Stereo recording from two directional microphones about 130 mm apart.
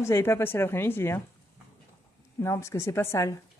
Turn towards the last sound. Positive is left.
turn(degrees=20)  # may be behind; listen again after turning